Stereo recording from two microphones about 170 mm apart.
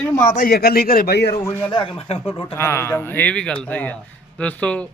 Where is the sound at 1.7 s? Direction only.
30° left (ahead or behind).